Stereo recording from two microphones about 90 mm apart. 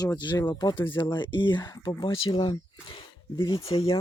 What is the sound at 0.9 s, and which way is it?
Speech, 60° left (ahead or behind).